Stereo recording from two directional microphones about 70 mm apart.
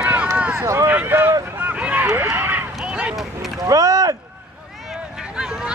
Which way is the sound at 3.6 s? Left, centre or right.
Right.